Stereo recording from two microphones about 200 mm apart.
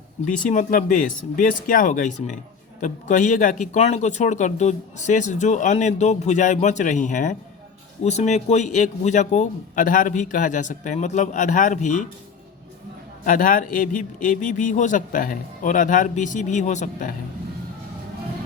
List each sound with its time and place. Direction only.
0.3 s speech: 40° left (ahead or behind)
13.2 s speech: 45° left (ahead or behind)